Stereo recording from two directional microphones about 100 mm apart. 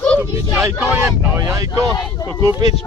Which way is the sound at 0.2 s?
25° right (ahead or behind).